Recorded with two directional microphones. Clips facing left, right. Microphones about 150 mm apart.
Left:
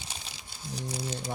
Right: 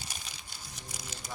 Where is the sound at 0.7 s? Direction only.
30° left (ahead or behind).